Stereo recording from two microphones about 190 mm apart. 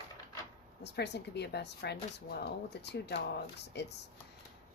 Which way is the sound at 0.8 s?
60° left (ahead or behind).